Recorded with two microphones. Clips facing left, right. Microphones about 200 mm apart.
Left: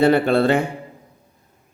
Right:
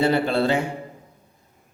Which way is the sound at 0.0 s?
55° left (ahead or behind).